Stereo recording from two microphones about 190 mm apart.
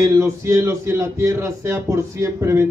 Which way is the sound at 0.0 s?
15° right (ahead or behind).